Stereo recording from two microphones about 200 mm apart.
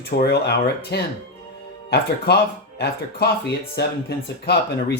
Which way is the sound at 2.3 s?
55° left (ahead or behind).